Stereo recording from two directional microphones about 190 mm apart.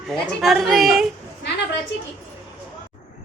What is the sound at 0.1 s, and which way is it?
Speech, centre (ahead or behind).